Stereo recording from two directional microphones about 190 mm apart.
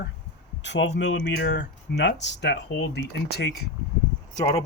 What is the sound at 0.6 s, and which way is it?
Speech, 70° left (ahead or behind).